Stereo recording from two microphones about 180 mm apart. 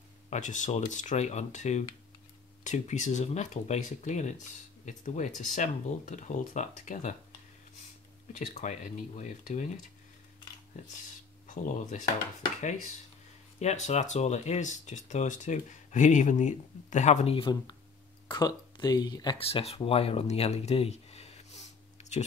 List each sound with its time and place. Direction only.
0.3 s speech: 45° left (ahead or behind)
8.3 s speech: 40° left (ahead or behind)
10.8 s speech: 40° left (ahead or behind)
13.6 s speech: 40° left (ahead or behind)